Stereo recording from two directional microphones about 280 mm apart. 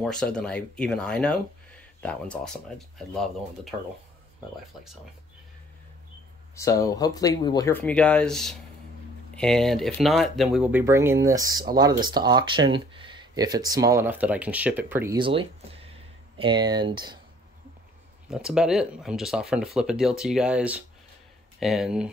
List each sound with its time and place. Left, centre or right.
0.0 s speech: centre
6.5 s speech: centre
18.3 s speech: centre